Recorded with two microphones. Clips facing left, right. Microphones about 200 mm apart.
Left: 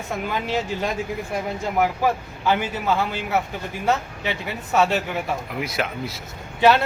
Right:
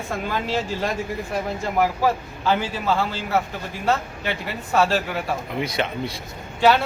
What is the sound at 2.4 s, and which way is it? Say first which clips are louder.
Speech: even; 15° left (ahead or behind).